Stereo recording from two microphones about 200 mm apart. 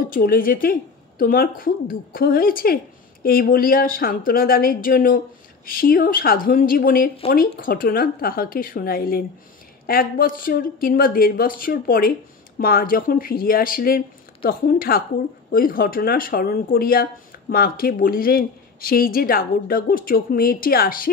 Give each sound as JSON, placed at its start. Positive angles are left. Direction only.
{"t": 0.1, "sound": "speech", "side_deg": 45}